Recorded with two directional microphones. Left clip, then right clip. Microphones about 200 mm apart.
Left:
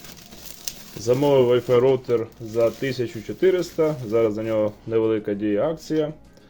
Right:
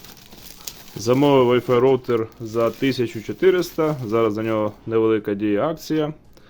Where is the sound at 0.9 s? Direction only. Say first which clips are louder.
Right 2 dB; 35° right (ahead or behind).